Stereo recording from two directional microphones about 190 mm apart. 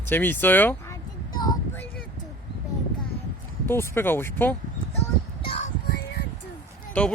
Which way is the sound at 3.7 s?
10° left (ahead or behind).